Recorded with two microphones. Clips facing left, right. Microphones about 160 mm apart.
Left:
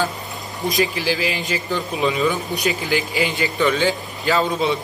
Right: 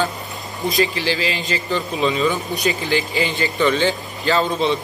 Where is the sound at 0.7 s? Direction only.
10° left (ahead or behind).